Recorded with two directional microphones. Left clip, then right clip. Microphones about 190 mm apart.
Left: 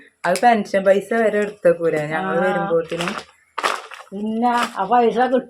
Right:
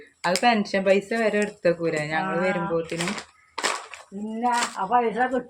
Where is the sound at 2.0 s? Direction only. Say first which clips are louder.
Left 5 dB; 45° left (ahead or behind).